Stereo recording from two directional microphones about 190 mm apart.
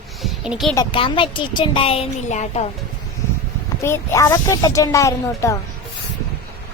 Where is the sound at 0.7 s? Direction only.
25° left (ahead or behind).